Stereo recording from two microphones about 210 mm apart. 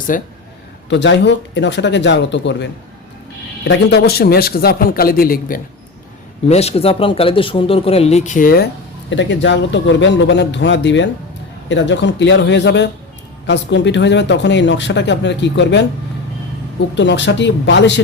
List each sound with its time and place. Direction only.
0.1 s a man's voice: 40° left (ahead or behind)
0.9 s a man's voice: 55° left (ahead or behind)
6.5 s a man's voice: 30° left (ahead or behind)
9.0 s speech: 60° left (ahead or behind)
17.0 s speech: 60° left (ahead or behind)